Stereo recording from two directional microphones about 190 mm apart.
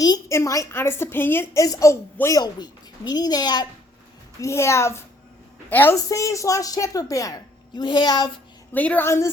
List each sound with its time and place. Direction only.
0.0 s a woman's voice: 15° left (ahead or behind)
8.7 s a woman's voice: 10° left (ahead or behind)